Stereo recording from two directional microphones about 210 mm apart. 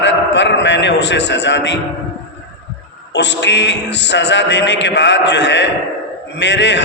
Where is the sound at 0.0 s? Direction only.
55° left (ahead or behind).